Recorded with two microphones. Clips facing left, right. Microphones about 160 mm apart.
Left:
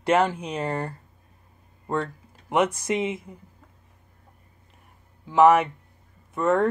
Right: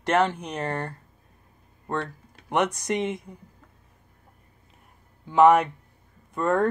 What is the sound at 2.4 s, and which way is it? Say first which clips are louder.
Speech: left 2 dB; 5° left (ahead or behind).